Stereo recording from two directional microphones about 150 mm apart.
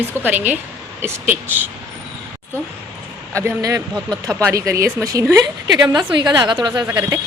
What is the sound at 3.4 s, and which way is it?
A woman's voice, 25° right (ahead or behind).